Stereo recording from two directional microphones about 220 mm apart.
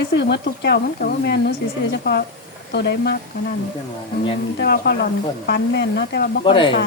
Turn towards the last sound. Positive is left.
turn(degrees=20)  # may be behind; listen again after turning